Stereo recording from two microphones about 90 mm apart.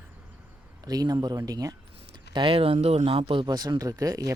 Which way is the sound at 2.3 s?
80° right.